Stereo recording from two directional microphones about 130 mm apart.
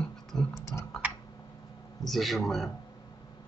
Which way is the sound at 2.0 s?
Centre (ahead or behind).